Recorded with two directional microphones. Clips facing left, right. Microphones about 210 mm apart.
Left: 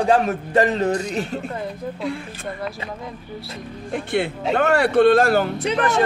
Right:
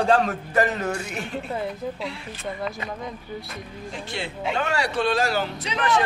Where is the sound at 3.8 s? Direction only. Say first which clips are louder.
Left 11 dB; 55° left (ahead or behind).